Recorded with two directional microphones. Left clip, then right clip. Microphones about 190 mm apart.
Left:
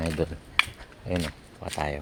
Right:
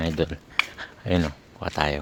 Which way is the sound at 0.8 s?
25° right (ahead or behind).